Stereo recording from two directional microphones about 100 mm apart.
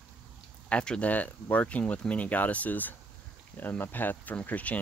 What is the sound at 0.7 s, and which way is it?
Speech, 10° left (ahead or behind).